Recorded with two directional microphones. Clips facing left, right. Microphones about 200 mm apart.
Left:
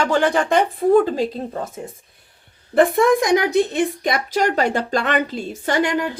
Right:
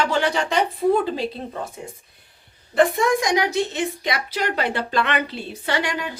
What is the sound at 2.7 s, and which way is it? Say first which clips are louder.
A woman's voice: left 4 dB; 55° left (ahead or behind).